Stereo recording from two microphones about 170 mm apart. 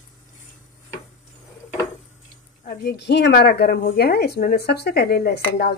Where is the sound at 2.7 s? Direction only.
75° left (ahead or behind).